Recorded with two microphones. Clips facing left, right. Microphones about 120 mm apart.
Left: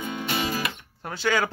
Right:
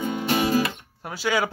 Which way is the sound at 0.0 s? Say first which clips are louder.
Right 5 dB; 45° right (ahead or behind).